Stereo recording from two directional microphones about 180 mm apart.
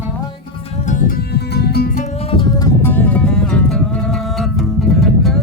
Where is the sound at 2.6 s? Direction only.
15° left (ahead or behind); by 5.4 s centre (ahead or behind).